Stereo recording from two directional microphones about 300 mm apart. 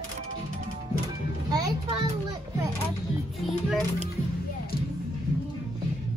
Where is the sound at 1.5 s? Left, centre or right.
Centre.